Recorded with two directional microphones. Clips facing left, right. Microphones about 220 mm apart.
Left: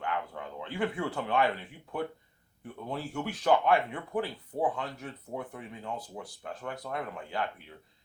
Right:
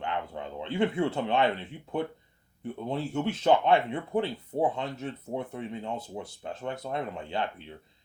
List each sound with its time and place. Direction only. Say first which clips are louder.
0.0 s speech: right 2 dB; 25° right (ahead or behind)